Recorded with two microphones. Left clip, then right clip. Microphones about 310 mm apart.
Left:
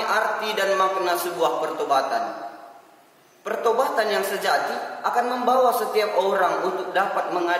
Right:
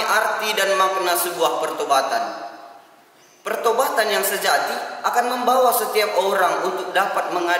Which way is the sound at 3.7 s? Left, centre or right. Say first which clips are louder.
Right 2 dB; centre.